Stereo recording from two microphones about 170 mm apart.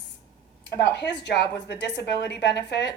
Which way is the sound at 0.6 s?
85° left.